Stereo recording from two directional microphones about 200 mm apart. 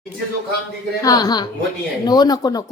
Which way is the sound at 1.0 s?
20° left (ahead or behind).